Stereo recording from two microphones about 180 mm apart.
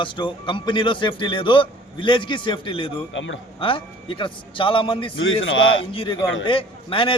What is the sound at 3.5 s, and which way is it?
A man's voice, 30° left (ahead or behind).